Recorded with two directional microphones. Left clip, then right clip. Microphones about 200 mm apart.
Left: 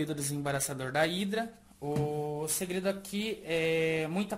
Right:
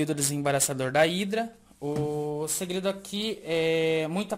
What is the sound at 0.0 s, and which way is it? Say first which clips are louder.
Speech: right 7 dB; 40° right (ahead or behind).